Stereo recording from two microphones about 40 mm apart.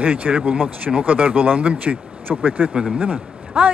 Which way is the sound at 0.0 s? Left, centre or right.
Right.